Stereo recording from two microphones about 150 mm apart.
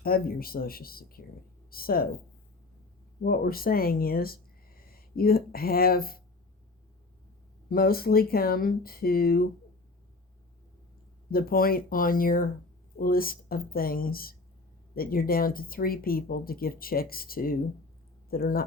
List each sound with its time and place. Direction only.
0.0 s speech: 80° left
3.2 s speech: 85° left
7.7 s speech: 85° left
11.3 s speech: 80° left